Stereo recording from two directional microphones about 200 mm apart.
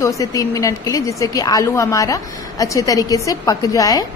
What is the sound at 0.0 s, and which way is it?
A woman's voice, 15° left (ahead or behind).